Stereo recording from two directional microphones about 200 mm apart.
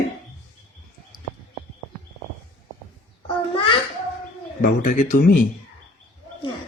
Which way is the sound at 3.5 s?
25° left (ahead or behind).